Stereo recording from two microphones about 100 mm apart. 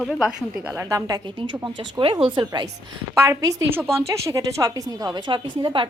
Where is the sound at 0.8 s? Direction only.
35° right (ahead or behind).